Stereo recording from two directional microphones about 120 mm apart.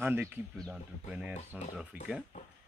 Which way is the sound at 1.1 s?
10° right (ahead or behind).